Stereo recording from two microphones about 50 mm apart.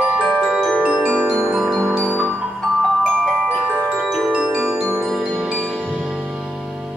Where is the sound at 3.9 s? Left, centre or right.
Centre.